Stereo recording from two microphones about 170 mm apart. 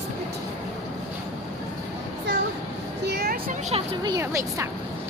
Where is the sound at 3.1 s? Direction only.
65° right (ahead or behind).